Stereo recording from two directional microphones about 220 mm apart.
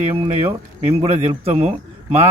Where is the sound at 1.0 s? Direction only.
25° right (ahead or behind).